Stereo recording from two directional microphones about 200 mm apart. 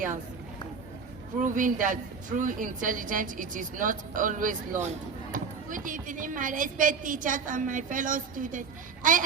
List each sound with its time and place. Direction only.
1.4 s a woman's voice: 40° right (ahead or behind)